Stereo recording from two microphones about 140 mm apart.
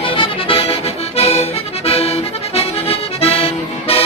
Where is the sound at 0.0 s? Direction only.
40° left (ahead or behind).